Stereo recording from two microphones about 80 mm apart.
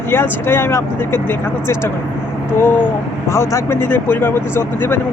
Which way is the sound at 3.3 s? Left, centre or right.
Left.